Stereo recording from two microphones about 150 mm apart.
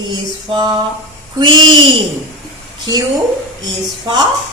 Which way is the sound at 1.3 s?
30° right (ahead or behind).